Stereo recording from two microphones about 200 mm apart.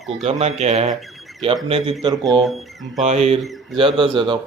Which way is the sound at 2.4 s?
Centre (ahead or behind).